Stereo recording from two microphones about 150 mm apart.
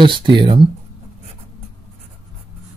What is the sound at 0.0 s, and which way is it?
Speech, 35° right (ahead or behind).